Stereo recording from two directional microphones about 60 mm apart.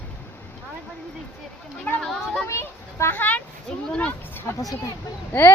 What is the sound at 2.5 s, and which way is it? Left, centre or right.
Children playing, left.